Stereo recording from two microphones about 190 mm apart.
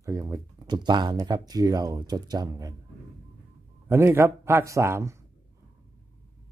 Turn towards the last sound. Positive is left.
turn(degrees=-15)  # may be behind; listen again after turning